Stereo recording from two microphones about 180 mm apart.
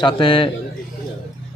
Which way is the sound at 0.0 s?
30° left (ahead or behind).